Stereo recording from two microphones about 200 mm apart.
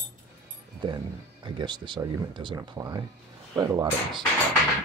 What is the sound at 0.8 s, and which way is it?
Speech, 20° right (ahead or behind).